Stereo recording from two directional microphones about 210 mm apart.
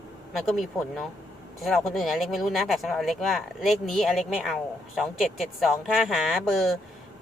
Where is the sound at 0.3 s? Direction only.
Centre (ahead or behind).